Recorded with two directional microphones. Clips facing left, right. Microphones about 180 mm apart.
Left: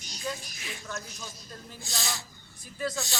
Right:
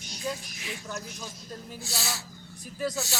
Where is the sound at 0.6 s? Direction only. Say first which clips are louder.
Right 2 dB; 15° right (ahead or behind).